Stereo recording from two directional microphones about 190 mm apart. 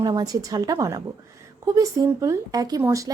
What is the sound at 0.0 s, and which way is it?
A woman's voice, 20° right (ahead or behind).